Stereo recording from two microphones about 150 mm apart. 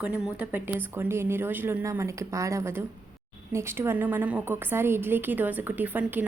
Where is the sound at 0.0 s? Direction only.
10° right (ahead or behind).